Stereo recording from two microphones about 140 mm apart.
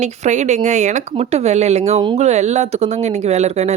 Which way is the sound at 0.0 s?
55° right (ahead or behind).